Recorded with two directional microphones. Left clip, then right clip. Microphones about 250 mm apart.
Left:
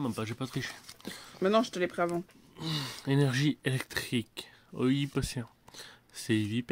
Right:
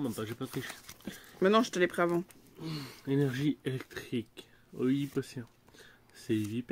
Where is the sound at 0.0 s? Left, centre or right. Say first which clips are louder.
Left 1 dB; left.